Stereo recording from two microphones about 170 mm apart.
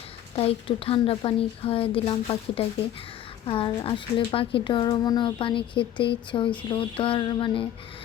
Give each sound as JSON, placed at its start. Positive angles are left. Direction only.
{"t": 0.3, "sound": "a woman's voice", "side_deg": 35}